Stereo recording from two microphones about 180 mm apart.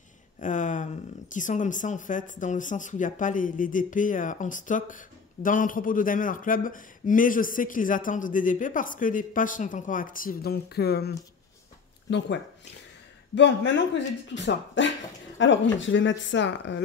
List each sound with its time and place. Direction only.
0.4 s a sound: 45° left (ahead or behind)
1.3 s speech: 45° left (ahead or behind); by 11.1 s 65° left (ahead or behind)
13.3 s speech: 75° left (ahead or behind)